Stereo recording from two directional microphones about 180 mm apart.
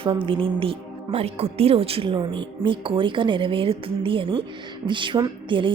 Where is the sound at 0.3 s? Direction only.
30° right (ahead or behind).